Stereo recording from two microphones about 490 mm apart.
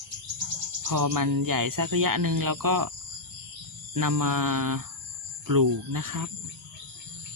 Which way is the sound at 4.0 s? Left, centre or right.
Right.